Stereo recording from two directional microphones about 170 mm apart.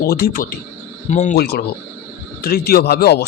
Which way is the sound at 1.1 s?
45° left (ahead or behind).